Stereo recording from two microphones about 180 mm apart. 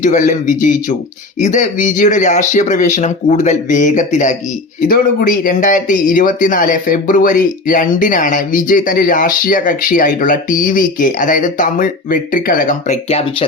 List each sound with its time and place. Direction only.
0.0 s speech: 45° left (ahead or behind)